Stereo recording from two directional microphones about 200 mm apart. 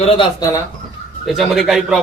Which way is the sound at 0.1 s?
20° left (ahead or behind).